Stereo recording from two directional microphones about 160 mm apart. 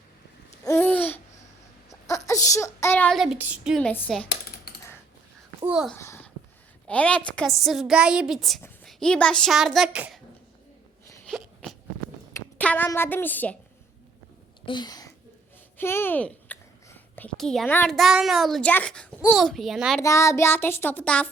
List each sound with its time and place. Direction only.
0.6 s babbling: 15° left (ahead or behind)
2.0 s speech: 20° left (ahead or behind)
3.3 s a woman's voice: 5° right (ahead or behind); by 4.3 s 10° left (ahead or behind)
5.6 s a woman's voice: 5° right (ahead or behind)
6.0 s a sound: 15° left (ahead or behind)
6.8 s a woman's voice: 5° left (ahead or behind)
11.3 s a sound: centre (ahead or behind)
12.3 s speech: 10° left (ahead or behind)
14.6 s a sound: 30° left (ahead or behind)
15.8 s a woman's voice: 15° left (ahead or behind); by 20.0 s centre (ahead or behind)
20.0 s a child's voice: 20° left (ahead or behind)